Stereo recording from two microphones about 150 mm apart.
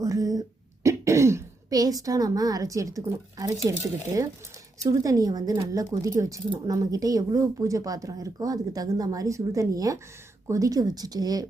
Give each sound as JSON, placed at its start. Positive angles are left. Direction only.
{"t": 0.0, "sound": "a woman's voice", "side_deg": -20}